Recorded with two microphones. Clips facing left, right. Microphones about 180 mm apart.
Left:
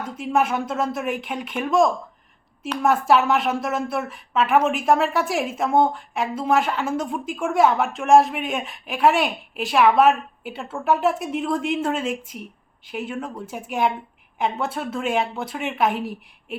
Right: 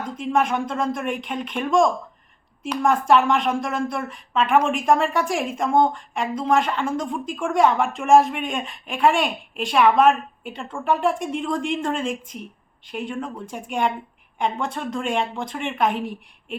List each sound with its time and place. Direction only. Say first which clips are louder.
0.2 s a woman's voice: even; 5° left (ahead or behind)